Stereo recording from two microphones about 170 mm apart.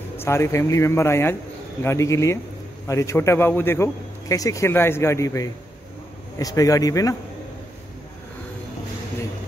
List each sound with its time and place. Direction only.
0.2 s a man's voice: 15° left (ahead or behind)